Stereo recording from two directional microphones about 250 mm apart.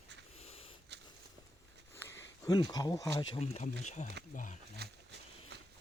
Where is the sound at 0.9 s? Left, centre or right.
Right.